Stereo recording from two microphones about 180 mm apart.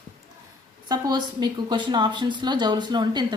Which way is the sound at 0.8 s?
20° right (ahead or behind).